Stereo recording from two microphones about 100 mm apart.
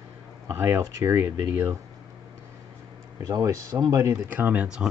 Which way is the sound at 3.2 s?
35° right (ahead or behind).